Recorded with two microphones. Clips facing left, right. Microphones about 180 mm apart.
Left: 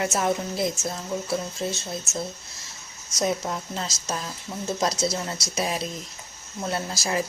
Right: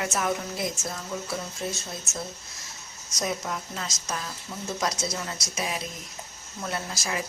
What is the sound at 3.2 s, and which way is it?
A woman's voice, 25° left (ahead or behind).